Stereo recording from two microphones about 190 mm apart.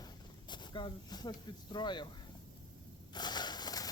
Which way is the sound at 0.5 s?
25° left (ahead or behind).